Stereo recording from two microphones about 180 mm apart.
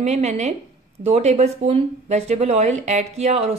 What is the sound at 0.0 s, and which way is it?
Speech, 40° right (ahead or behind).